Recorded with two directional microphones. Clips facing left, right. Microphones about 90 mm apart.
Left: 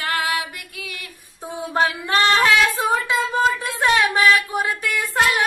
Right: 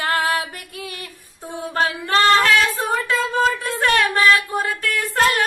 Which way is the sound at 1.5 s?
15° left (ahead or behind).